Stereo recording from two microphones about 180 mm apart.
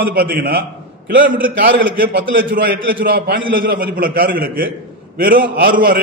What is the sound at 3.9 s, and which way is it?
A man's voice, 55° right (ahead or behind).